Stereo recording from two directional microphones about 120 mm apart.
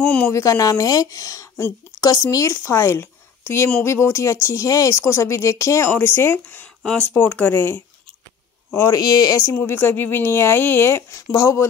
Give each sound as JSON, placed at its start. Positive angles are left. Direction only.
{"t": 0.3, "sound": "speech", "side_deg": 25}
{"t": 8.7, "sound": "speech", "side_deg": 30}
{"t": 9.5, "sound": "speech", "side_deg": 20}